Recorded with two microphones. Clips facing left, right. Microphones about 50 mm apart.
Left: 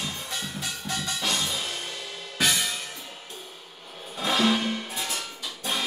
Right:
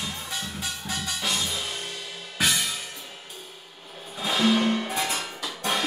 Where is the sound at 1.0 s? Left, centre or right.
Centre.